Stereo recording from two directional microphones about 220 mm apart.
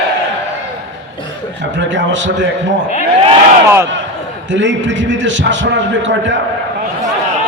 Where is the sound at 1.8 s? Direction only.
55° right (ahead or behind).